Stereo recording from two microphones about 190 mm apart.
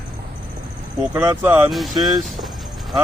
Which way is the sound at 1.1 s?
15° right (ahead or behind).